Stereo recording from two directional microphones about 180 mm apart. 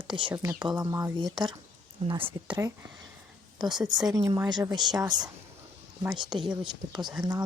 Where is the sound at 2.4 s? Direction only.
20° right (ahead or behind).